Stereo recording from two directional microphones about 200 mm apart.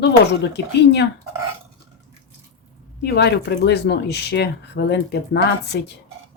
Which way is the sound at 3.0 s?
55° left (ahead or behind).